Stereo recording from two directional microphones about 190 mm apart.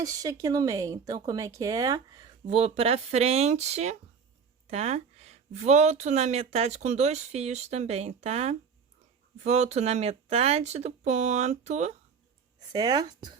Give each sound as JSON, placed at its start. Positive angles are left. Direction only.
{"t": 0.0, "sound": "speech", "side_deg": -20}
{"t": 2.5, "sound": "speech", "side_deg": -30}
{"t": 12.5, "sound": "speech", "side_deg": -20}